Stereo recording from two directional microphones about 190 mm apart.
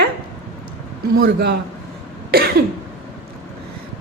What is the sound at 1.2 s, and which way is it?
Speech, 60° right (ahead or behind).